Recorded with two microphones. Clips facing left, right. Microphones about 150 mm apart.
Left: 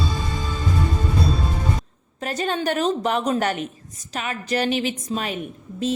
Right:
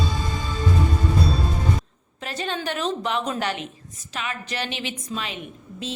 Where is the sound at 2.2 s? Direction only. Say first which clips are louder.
Left 5 dB; 45° left (ahead or behind).